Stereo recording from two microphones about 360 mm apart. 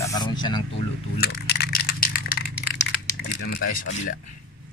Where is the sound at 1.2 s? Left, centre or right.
Left.